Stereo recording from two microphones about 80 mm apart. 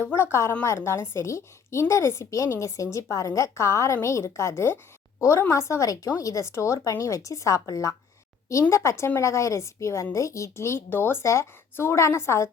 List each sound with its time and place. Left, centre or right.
0.0 s a woman's voice: left